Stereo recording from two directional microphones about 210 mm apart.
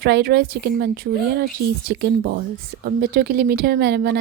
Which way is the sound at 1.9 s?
55° right (ahead or behind).